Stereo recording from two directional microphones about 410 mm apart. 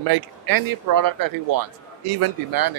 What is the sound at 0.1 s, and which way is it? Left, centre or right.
Speech, right.